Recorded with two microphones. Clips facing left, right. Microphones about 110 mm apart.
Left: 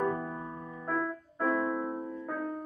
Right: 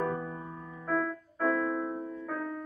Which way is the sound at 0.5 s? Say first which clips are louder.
Left 2 dB; 30° left (ahead or behind).